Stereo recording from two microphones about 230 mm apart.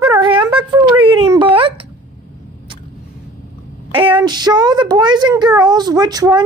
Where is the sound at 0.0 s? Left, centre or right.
Centre.